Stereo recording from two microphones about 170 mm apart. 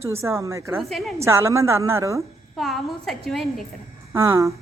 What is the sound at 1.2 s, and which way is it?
A woman's voice, 15° right (ahead or behind).